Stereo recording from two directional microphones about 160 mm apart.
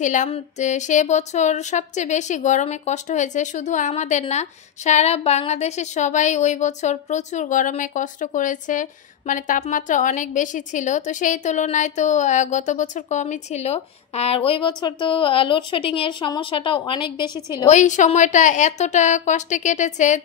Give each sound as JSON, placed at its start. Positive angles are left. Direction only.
{"t": 0.0, "sound": "a woman's voice", "side_deg": 50}
{"t": 17.6, "sound": "a woman's voice", "side_deg": 50}